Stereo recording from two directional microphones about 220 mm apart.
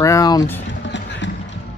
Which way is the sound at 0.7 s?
55° left (ahead or behind).